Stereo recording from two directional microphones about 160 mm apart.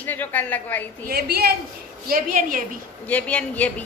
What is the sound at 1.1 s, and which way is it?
Speech, 80° right.